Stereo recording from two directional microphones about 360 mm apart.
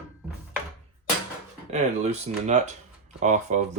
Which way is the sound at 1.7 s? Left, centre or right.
Centre.